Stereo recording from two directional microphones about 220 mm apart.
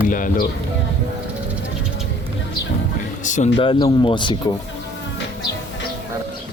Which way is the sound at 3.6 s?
20° left (ahead or behind).